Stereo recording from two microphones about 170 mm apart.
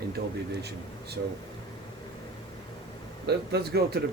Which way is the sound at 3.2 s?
70° right (ahead or behind).